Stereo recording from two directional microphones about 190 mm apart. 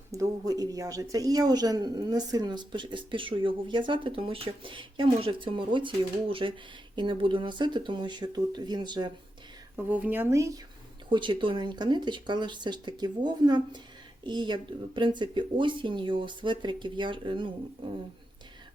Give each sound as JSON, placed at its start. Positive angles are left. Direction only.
{"t": 0.1, "sound": "speech", "side_deg": -20}
{"t": 9.7, "sound": "speech", "side_deg": -5}